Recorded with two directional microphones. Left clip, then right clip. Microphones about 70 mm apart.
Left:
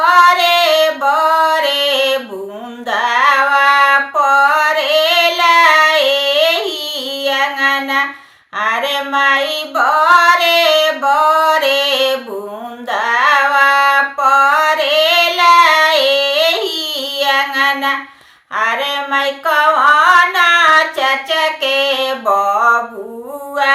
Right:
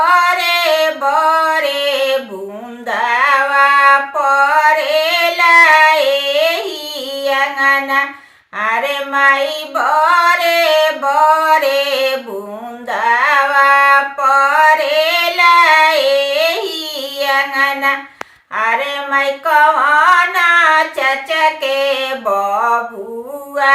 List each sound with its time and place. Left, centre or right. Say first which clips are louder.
0.0 s music: left 3 dB; right
2.9 s mantra: left 1 dB; right
4.4 s female singing: right 1 dB; right
7.2 s child singing: right 1 dB; right
8.5 s a sound: even; right
9.4 s female singing: left 1 dB; right
11.1 s music: right 1 dB; right
12.9 s a sound: even; right